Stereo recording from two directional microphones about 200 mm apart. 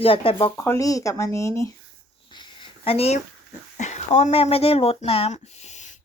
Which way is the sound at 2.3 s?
25° left (ahead or behind).